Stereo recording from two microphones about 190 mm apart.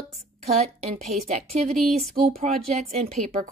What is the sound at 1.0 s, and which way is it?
A woman's voice, 35° right (ahead or behind).